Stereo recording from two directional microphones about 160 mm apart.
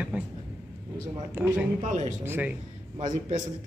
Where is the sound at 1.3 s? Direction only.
10° right (ahead or behind).